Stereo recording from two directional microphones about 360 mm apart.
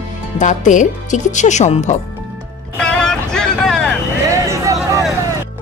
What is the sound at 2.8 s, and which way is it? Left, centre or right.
Vehicle, centre.